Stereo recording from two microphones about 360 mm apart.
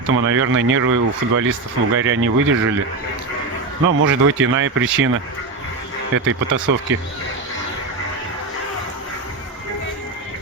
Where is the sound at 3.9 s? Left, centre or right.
Right.